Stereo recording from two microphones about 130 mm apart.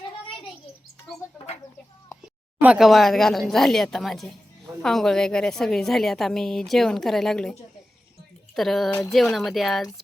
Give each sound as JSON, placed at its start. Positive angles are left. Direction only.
{"t": 2.6, "sound": "a woman's voice", "side_deg": -5}
{"t": 8.5, "sound": "a woman's voice", "side_deg": 0}
{"t": 8.9, "sound": "speech", "side_deg": 25}
{"t": 9.1, "sound": "a woman's voice", "side_deg": 0}